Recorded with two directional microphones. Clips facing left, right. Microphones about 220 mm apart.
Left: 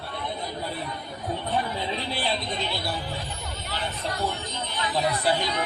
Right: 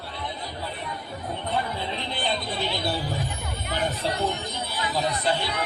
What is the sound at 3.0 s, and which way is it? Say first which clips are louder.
Music: right 3 dB; 50° right (ahead or behind).